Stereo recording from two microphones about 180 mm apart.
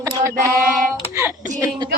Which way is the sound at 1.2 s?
15° right (ahead or behind).